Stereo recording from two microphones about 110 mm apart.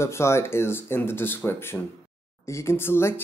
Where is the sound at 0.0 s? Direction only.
25° left (ahead or behind).